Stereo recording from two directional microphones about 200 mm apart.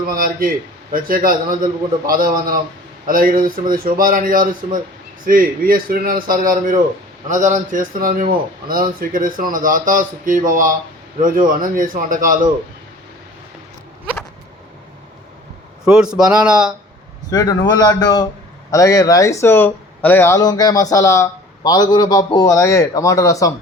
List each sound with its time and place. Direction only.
0.2 s a man's voice: 45° right (ahead or behind)
15.8 s speech: 5° right (ahead or behind)
17.3 s a man's voice: 20° left (ahead or behind)